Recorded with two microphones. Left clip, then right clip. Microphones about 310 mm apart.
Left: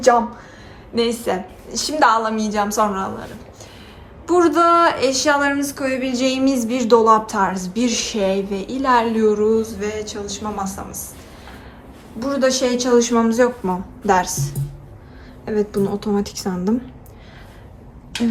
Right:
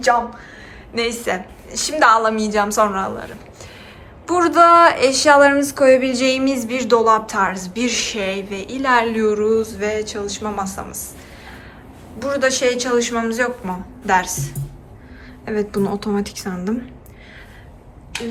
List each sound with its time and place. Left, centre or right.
1.2 s a woman's voice: centre
4.3 s a woman's voice: centre
12.2 s a woman's voice: centre